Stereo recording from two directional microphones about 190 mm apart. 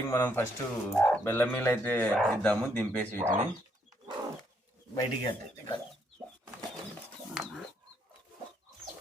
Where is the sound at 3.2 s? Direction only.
40° right (ahead or behind).